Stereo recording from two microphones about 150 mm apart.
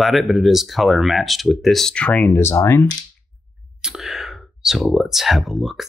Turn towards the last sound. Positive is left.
turn(degrees=0)  # may be behind; listen again after turning